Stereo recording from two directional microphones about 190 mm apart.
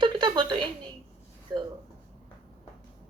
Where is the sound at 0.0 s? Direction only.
25° right (ahead or behind).